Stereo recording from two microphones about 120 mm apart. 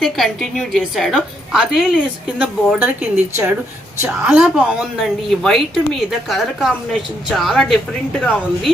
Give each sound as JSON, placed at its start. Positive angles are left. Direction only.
{"t": 0.0, "sound": "a woman's voice", "side_deg": 0}
{"t": 4.4, "sound": "a woman's voice", "side_deg": -10}